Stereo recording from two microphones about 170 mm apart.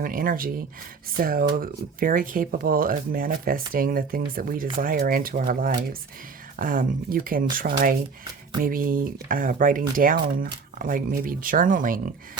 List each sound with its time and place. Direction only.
0.0 s speech: 55° right (ahead or behind)